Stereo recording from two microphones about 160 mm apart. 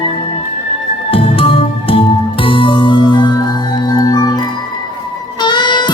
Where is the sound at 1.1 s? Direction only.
35° left (ahead or behind).